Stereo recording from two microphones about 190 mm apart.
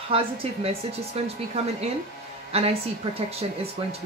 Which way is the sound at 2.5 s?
30° right (ahead or behind).